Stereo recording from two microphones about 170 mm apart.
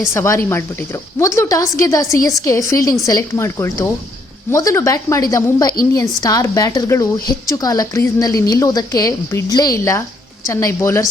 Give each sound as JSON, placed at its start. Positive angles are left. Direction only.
{"t": 0.1, "sound": "a woman's voice", "side_deg": 15}